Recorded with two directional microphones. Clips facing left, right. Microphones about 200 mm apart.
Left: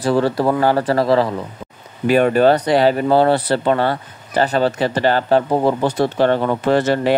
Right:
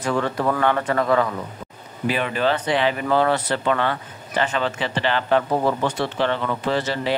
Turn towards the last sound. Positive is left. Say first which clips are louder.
# left 7 dB
turn(degrees=50)  # may be behind; listen again after turning